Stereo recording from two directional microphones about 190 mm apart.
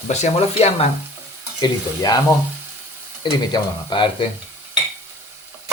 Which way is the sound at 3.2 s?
25° left (ahead or behind).